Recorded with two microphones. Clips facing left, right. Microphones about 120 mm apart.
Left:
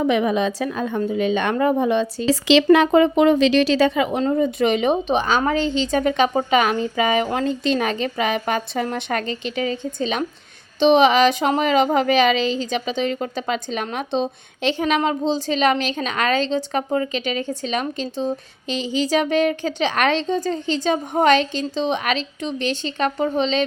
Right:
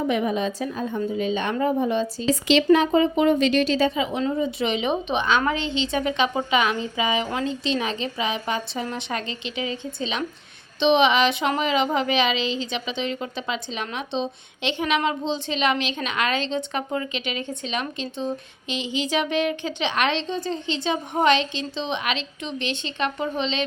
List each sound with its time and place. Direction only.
0.0 s a woman's voice: 90° left
2.7 s a woman's voice: 65° left (ahead or behind); by 23.6 s 40° left (ahead or behind)